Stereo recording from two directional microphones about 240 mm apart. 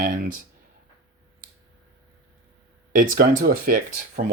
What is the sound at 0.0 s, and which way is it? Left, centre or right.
Speech, right.